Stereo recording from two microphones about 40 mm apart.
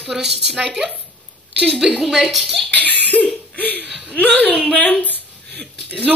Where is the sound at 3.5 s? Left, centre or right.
Left.